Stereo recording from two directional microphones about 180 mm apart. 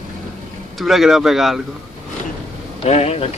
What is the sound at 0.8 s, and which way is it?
Speech, centre (ahead or behind).